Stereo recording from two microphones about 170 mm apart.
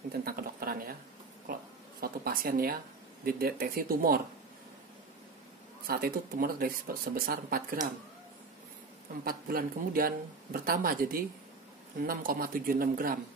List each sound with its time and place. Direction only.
0.2 s a sound: 60° right (ahead or behind)
3.3 s speech: 60° right (ahead or behind)
5.9 s speech: 60° right (ahead or behind)
9.2 s speech: 60° right (ahead or behind)